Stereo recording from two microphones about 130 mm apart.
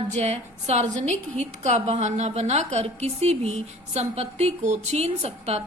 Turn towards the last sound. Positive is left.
turn(degrees=-55)  # may be behind; listen again after turning